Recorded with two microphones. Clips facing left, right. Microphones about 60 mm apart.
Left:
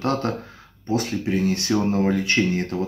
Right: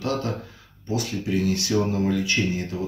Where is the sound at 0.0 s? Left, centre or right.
Left.